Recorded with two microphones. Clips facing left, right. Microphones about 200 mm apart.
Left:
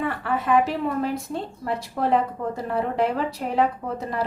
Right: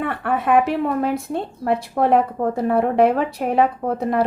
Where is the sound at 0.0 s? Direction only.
60° right (ahead or behind).